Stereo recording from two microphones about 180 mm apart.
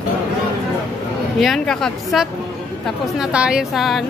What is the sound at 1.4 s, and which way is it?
A woman's voice, centre (ahead or behind).